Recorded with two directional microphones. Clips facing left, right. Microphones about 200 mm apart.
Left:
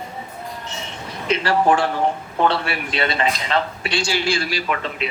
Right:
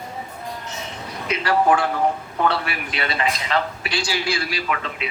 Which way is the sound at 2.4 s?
30° left (ahead or behind).